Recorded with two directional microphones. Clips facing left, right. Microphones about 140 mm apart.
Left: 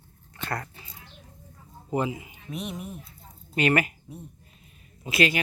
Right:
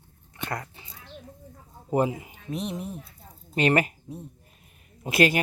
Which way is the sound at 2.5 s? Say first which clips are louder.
Right 3 dB; 30° right (ahead or behind).